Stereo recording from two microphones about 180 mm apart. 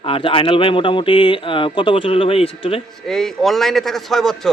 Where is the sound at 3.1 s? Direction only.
Centre (ahead or behind).